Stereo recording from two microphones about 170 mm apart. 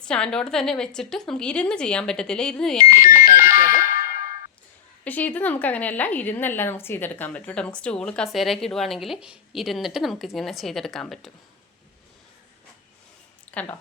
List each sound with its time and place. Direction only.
0.0 s a woman's voice: 5° left (ahead or behind)
3.2 s music: 55° left (ahead or behind)
5.0 s a woman's voice: 10° left (ahead or behind)
13.5 s speech: 10° left (ahead or behind)